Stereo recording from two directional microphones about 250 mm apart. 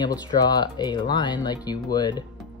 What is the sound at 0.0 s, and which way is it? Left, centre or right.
Speech, centre.